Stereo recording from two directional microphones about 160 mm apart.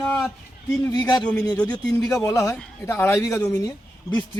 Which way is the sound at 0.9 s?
25° left (ahead or behind).